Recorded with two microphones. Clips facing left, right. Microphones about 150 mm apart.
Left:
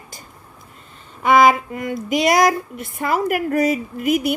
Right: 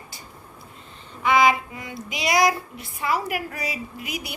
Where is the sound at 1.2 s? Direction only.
50° left (ahead or behind).